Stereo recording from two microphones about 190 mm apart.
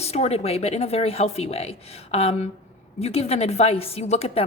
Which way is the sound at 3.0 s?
35° left (ahead or behind).